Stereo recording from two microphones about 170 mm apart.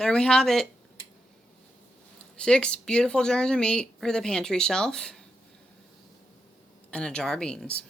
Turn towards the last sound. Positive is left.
turn(degrees=5)  # may be behind; listen again after turning